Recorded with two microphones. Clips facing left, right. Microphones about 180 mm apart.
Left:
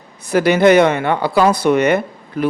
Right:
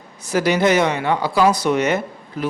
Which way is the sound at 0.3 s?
60° left (ahead or behind).